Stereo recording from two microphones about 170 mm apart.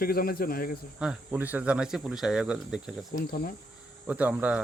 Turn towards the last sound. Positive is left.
turn(degrees=-5)  # may be behind; listen again after turning